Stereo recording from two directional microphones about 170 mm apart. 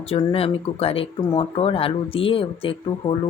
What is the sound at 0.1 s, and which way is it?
Speech, 30° left (ahead or behind).